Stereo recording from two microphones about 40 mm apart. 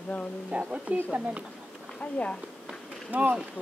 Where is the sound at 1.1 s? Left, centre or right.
Right.